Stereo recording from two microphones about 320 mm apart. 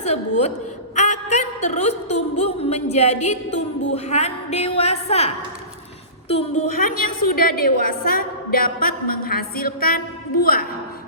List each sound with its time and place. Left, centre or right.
0.0 s a woman's voice: left
0.9 s a sound: left
3.9 s a woman's voice: centre